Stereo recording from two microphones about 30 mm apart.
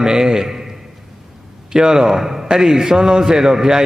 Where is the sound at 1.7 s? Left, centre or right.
Right.